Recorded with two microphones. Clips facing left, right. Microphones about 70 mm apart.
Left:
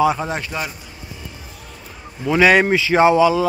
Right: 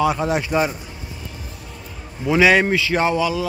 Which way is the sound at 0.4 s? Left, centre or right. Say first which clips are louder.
Right 6 dB; centre.